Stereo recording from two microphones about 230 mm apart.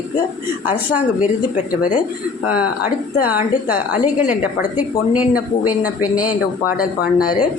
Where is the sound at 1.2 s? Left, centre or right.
Left.